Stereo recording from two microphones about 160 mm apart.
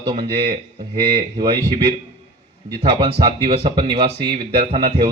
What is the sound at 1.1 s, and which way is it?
Speech, 30° right (ahead or behind).